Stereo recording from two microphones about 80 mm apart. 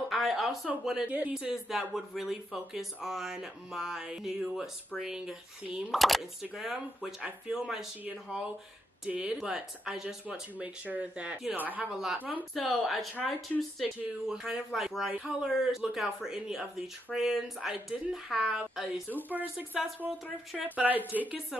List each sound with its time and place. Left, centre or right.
0.1 s a sound: centre
1.0 s speech: right
1.3 s speech: centre
9.0 s speech: centre
11.9 s speech: centre
12.2 s speech: right
12.5 s speech: centre
19.2 s speech: right